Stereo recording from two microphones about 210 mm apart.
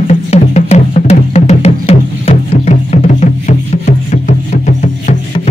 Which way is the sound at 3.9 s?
35° left (ahead or behind).